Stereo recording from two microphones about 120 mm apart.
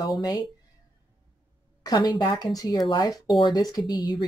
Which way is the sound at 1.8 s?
35° left (ahead or behind).